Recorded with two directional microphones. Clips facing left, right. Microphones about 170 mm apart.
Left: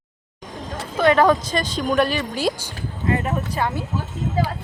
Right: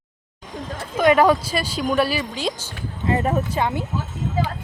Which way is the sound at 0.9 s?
10° right (ahead or behind).